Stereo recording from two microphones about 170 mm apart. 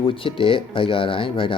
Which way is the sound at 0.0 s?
30° left (ahead or behind).